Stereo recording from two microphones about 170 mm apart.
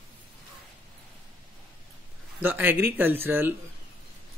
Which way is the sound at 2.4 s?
10° right (ahead or behind).